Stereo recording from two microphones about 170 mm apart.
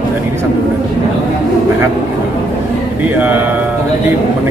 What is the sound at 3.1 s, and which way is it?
Speech, 10° right (ahead or behind).